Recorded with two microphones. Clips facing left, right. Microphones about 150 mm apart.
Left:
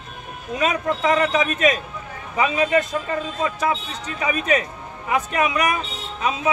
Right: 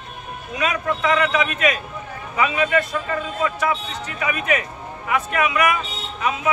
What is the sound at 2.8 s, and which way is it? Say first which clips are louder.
Speech: even; 25° left (ahead or behind).